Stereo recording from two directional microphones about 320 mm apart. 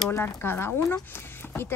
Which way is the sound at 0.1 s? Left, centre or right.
Centre.